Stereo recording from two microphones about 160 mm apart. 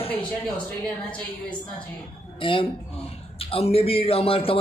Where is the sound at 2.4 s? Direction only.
35° left (ahead or behind).